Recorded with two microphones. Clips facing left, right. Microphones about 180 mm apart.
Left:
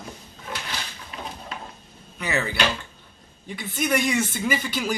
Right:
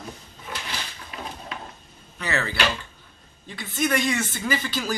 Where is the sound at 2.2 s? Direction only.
15° left (ahead or behind).